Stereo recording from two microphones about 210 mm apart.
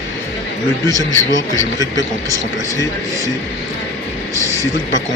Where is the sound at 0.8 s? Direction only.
15° right (ahead or behind).